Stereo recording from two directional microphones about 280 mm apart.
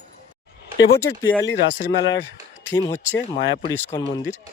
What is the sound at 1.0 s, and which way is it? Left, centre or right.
Speech, centre.